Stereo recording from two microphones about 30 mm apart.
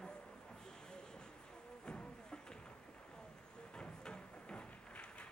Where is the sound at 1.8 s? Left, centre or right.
Left.